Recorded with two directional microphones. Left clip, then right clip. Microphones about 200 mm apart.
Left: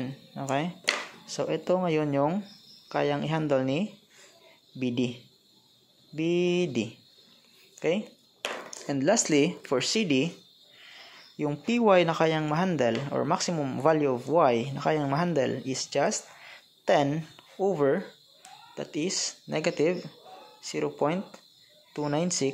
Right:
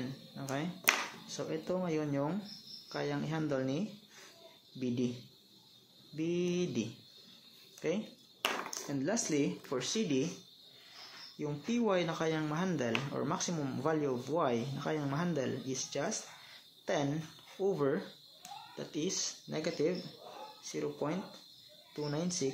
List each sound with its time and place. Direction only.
0.0 s a sound: 40° left (ahead or behind)
1.2 s speech: 40° left (ahead or behind)
6.1 s speech: 35° left (ahead or behind)
11.3 s speech: 40° left (ahead or behind)